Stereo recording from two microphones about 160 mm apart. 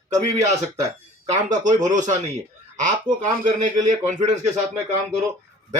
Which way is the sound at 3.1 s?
30° right (ahead or behind).